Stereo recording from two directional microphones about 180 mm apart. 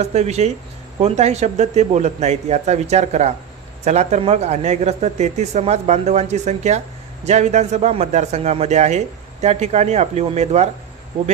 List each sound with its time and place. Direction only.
0.0 s a man's voice: 35° right (ahead or behind)